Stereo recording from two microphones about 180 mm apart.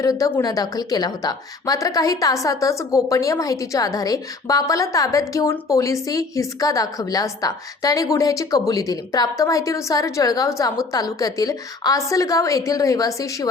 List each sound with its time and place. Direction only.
0.0 s a woman's voice: 20° left (ahead or behind)